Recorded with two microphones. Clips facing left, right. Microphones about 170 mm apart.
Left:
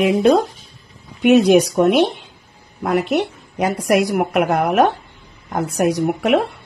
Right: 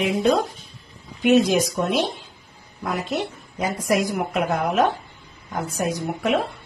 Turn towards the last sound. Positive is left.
turn(degrees=70)  # may be behind; listen again after turning